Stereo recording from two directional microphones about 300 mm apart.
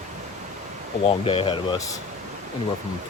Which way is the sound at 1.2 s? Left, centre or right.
Centre.